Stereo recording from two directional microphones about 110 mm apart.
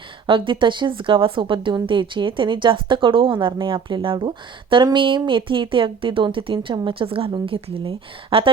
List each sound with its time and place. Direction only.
0.3 s speech: 50° right (ahead or behind)